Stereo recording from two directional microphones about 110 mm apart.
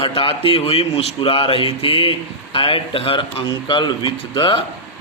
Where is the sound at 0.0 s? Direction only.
55° left (ahead or behind).